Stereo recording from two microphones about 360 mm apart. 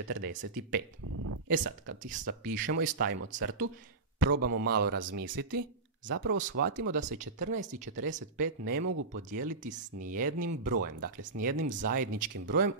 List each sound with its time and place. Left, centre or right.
0.1 s speech: right